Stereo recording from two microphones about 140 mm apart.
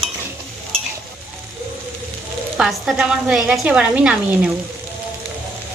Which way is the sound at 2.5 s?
5° right (ahead or behind).